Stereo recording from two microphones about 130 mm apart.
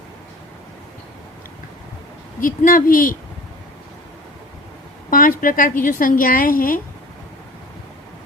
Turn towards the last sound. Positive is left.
turn(degrees=90)